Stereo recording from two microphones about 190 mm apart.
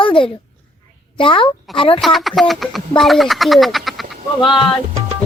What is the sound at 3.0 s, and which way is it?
Speech, centre (ahead or behind).